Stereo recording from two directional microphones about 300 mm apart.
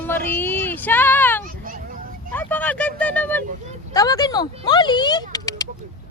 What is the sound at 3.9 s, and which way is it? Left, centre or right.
Speech, centre.